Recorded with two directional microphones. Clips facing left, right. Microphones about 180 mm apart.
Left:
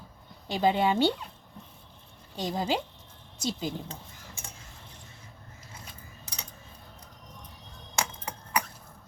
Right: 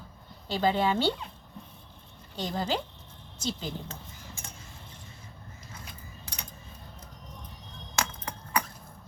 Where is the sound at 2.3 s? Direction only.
15° left (ahead or behind).